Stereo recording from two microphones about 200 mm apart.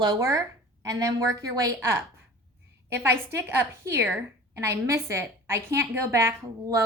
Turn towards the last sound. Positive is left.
turn(degrees=-15)  # may be behind; listen again after turning